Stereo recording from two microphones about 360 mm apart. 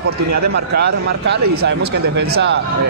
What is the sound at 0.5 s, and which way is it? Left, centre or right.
Speech, right.